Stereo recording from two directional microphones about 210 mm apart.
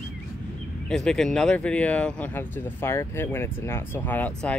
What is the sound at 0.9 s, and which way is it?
Speech, centre (ahead or behind).